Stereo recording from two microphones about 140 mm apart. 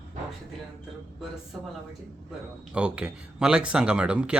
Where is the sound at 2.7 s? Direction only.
5° right (ahead or behind).